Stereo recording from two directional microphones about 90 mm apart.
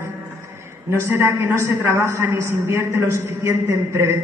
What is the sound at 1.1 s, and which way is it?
A woman's voice, 30° right (ahead or behind).